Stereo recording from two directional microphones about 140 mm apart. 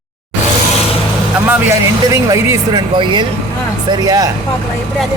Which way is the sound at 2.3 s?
30° right (ahead or behind).